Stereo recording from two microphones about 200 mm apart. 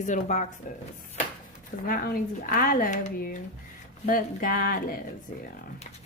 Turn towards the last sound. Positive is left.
turn(degrees=45)  # may be behind; listen again after turning